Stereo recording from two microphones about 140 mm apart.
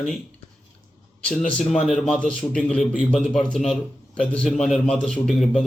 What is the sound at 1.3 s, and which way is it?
A man's voice, 5° left (ahead or behind).